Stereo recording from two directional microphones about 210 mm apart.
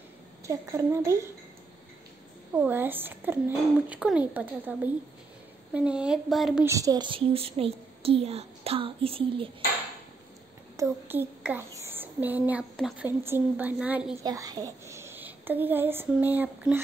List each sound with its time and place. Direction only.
0.5 s a woman's voice: 15° right (ahead or behind)
2.5 s a woman's voice: 10° right (ahead or behind)
6.7 s a woman's voice: 15° right (ahead or behind)
10.8 s a woman's voice: 10° right (ahead or behind)
14.2 s a child's voice: 20° right (ahead or behind)